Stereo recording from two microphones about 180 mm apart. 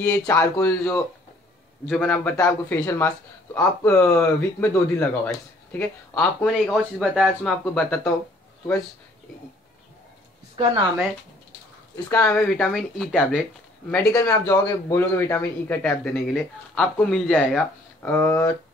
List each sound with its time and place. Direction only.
0.0 s a man's voice: 20° left (ahead or behind)
10.5 s a sound: 30° right (ahead or behind)
12.1 s a man's voice: 10° left (ahead or behind)
13.8 s a man's voice: 15° left (ahead or behind)